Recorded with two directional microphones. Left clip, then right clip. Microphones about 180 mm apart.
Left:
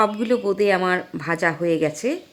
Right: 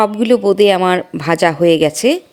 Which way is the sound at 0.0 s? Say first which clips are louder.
Right 7 dB; 30° right (ahead or behind).